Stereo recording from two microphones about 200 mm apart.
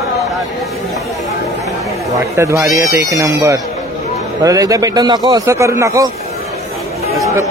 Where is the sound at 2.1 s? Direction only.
15° right (ahead or behind).